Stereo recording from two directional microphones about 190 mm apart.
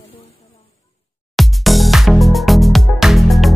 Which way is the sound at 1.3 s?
Centre (ahead or behind).